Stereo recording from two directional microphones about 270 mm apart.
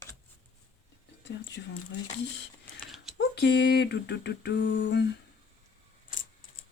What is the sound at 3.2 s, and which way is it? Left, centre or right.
Speech, left.